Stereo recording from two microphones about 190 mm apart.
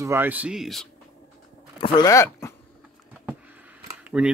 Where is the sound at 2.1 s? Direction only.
15° left (ahead or behind).